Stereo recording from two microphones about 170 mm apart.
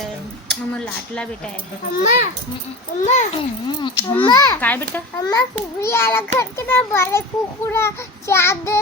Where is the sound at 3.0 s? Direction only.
45° left (ahead or behind).